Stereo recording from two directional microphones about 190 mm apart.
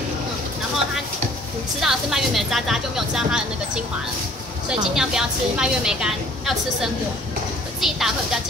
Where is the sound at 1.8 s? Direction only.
Centre (ahead or behind).